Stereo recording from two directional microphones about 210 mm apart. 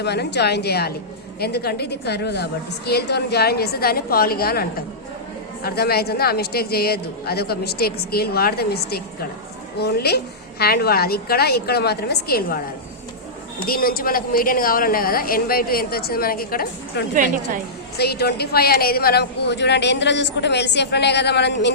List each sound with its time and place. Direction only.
0.0 s a woman's voice: 50° left (ahead or behind)
5.6 s a woman's voice: 50° left (ahead or behind)
13.7 s a woman's voice: 45° left (ahead or behind)